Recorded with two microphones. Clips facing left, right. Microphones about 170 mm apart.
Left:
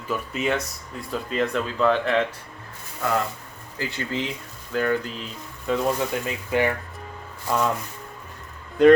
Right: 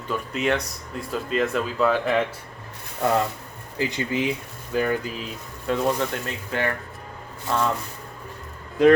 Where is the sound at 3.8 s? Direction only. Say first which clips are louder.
Right 4 dB; 15° right (ahead or behind).